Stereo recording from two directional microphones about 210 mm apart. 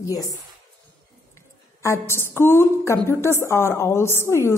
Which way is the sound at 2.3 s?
10° left (ahead or behind).